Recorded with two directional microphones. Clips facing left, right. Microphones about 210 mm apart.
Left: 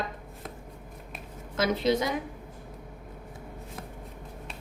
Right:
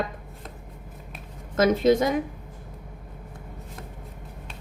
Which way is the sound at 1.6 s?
50° right (ahead or behind).